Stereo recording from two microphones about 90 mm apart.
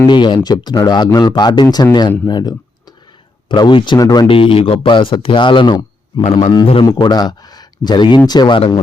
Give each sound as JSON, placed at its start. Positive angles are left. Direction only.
{"t": 0.1, "sound": "speech", "side_deg": 60}
{"t": 3.5, "sound": "speech", "side_deg": 60}
{"t": 3.9, "sound": "speech", "side_deg": 45}
{"t": 4.3, "sound": "speech", "side_deg": 80}
{"t": 5.7, "sound": "speech", "side_deg": 50}
{"t": 8.5, "sound": "speech", "side_deg": 75}